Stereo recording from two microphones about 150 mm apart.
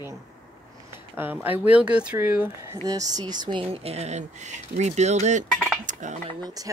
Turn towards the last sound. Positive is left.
turn(degrees=-55)  # may be behind; listen again after turning